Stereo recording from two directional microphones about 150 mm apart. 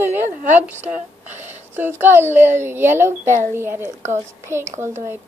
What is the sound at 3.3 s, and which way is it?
Speech, 60° right (ahead or behind).